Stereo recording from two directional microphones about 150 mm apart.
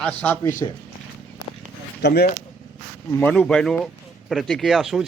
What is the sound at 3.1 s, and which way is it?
Speech, 10° left (ahead or behind).